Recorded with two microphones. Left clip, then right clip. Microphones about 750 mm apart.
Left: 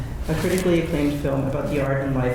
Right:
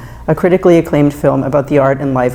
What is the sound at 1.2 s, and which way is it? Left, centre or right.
Speech, right.